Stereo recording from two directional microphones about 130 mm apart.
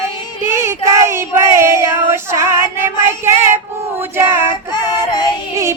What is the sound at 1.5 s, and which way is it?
Child singing, 20° right (ahead or behind).